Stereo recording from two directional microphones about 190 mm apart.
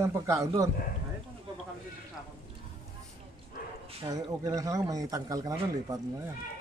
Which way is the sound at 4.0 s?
20° right (ahead or behind).